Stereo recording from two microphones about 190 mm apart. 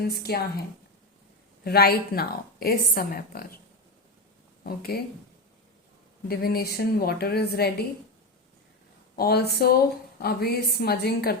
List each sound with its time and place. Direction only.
0.0 s a woman's voice: 55° left (ahead or behind)
1.6 s speech: 55° left (ahead or behind)
4.6 s speech: 55° left (ahead or behind)
6.2 s a woman's voice: 55° left (ahead or behind)
9.1 s a woman's voice: 55° left (ahead or behind)